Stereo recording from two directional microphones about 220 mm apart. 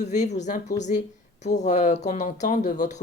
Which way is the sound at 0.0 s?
30° left (ahead or behind).